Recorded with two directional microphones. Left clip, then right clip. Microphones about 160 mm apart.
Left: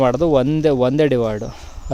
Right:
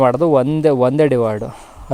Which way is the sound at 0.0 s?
15° left (ahead or behind).